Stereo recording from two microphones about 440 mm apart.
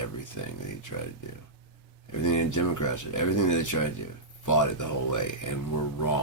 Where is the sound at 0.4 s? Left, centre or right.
Left.